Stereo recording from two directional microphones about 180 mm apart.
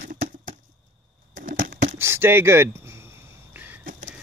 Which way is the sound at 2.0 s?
15° right (ahead or behind).